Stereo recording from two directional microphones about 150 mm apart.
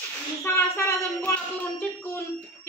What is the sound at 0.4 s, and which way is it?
Speech, 15° left (ahead or behind).